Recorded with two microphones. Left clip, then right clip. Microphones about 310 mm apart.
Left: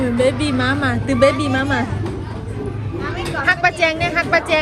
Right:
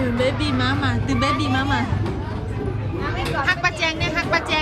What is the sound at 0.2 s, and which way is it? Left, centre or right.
Speech, centre.